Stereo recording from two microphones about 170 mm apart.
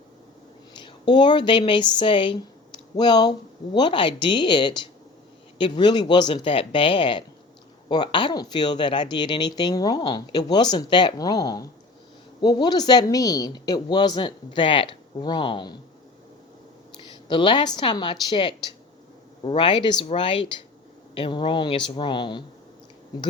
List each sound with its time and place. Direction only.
1.1 s speech: 25° left (ahead or behind)
17.0 s a woman's voice: 30° left (ahead or behind)